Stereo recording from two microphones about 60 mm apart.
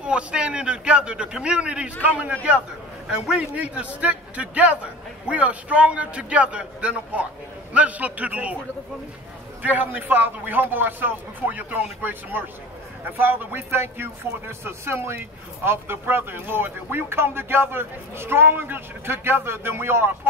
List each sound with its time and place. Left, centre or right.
0.0 s a man's voice: centre
3.1 s a man's voice: centre
9.6 s speech: right